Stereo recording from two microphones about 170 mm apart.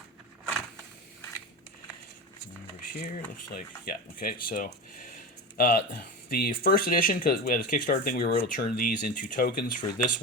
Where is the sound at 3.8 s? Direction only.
60° left (ahead or behind).